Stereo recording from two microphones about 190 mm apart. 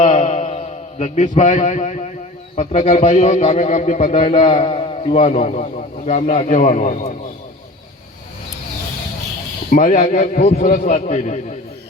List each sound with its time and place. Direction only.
0.0 s a sound: 35° left (ahead or behind)
1.4 s a man's voice: 40° left (ahead or behind)
9.6 s a man's voice: 45° left (ahead or behind)